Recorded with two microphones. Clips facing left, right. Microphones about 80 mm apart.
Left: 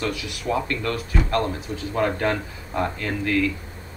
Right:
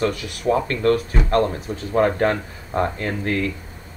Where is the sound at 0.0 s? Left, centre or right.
Right.